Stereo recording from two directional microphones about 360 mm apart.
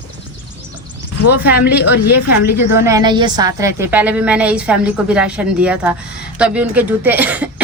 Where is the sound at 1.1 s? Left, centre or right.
Left.